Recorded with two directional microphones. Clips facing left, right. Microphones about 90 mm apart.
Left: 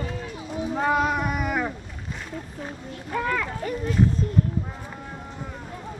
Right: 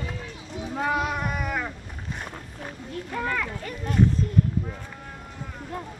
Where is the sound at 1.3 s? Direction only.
15° left (ahead or behind).